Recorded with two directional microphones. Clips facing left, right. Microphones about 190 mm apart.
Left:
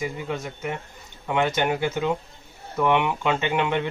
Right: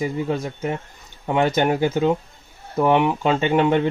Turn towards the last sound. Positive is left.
turn(degrees=-40)  # may be behind; listen again after turning